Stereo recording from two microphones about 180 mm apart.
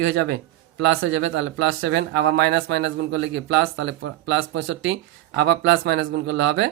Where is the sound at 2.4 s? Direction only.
70° right (ahead or behind).